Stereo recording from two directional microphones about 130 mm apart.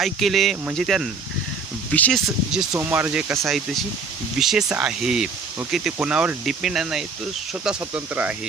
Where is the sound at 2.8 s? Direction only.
15° right (ahead or behind).